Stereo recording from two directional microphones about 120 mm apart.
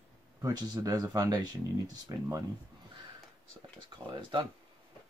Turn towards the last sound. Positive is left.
turn(degrees=-40)  # may be behind; listen again after turning